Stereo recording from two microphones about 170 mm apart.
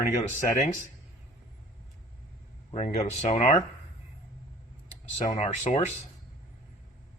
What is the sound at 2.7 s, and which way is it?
Speech, 40° left (ahead or behind).